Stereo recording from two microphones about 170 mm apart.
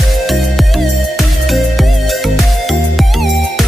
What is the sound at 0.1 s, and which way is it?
Music, centre (ahead or behind).